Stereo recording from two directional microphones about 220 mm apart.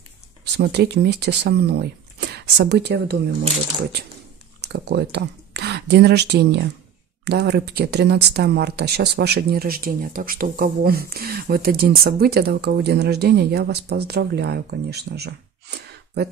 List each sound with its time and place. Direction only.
0.6 s speech: 50° right (ahead or behind)
4.7 s speech: 50° right (ahead or behind)